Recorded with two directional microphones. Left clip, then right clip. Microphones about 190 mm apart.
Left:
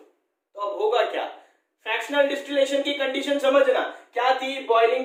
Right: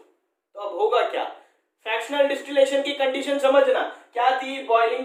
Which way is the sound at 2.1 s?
20° right (ahead or behind).